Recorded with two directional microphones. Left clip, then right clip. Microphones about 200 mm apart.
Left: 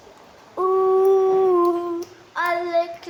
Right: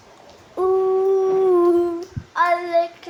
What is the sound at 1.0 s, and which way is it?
Howl, centre (ahead or behind).